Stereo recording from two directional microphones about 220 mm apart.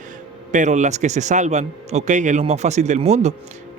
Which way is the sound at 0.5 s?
35° right (ahead or behind).